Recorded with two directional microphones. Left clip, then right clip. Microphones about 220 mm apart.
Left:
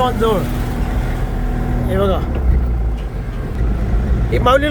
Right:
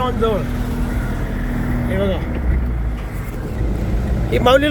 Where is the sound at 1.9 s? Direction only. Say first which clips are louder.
Left 4 dB; 15° left (ahead or behind).